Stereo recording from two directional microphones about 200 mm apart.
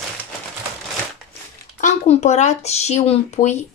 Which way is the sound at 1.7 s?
35° left (ahead or behind).